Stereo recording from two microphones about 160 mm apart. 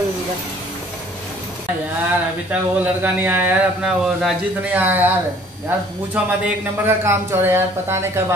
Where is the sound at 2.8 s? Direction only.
10° right (ahead or behind).